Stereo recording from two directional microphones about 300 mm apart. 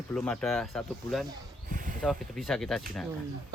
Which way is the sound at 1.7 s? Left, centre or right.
Right.